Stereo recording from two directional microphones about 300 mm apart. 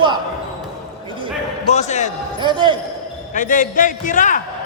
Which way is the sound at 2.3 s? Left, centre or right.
Centre.